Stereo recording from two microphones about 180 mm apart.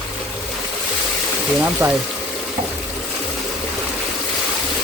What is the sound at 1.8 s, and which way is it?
Speech, 20° right (ahead or behind).